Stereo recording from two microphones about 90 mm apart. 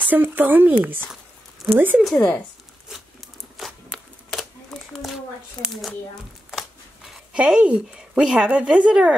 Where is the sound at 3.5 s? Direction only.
Centre (ahead or behind).